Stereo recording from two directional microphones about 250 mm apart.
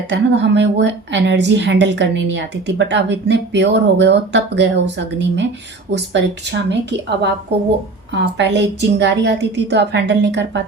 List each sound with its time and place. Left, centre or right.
0.1 s a woman's voice: right
8.1 s a woman's voice: right